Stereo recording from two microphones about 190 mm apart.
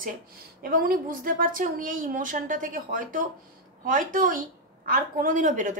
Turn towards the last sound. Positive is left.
turn(degrees=-40)  # may be behind; listen again after turning